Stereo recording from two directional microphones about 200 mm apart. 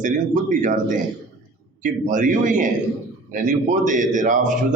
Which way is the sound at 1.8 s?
40° right (ahead or behind).